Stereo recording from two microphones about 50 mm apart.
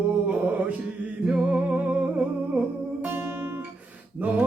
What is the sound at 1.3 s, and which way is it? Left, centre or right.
Music, centre.